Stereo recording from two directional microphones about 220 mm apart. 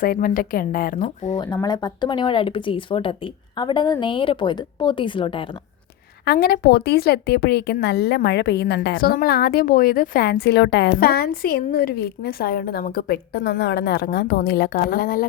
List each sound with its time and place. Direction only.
0.0 s a woman's voice: 40° left (ahead or behind)
1.5 s speech: 20° left (ahead or behind)
6.2 s a woman's voice: 45° left (ahead or behind)